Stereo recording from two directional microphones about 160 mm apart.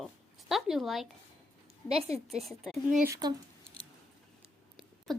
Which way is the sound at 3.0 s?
20° right (ahead or behind).